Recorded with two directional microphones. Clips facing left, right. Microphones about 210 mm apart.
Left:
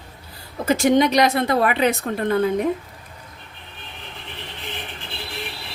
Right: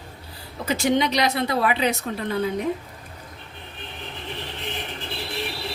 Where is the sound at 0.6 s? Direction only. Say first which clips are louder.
Left 5 dB; 45° left (ahead or behind).